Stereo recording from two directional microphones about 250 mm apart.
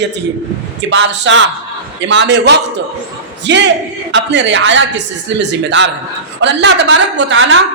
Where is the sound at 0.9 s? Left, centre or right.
Right.